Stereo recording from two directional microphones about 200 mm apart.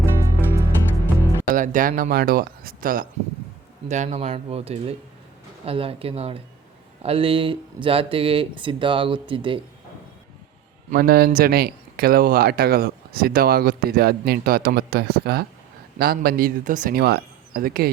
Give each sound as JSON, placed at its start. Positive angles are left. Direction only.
{"t": 0.0, "sound": "music", "side_deg": -15}
{"t": 1.5, "sound": "speech", "side_deg": -40}
{"t": 10.9, "sound": "speech", "side_deg": -50}